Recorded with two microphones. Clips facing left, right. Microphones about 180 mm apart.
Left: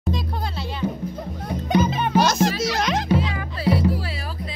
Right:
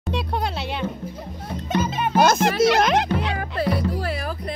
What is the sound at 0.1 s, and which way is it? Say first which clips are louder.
Music: right 3 dB; 65° right (ahead or behind).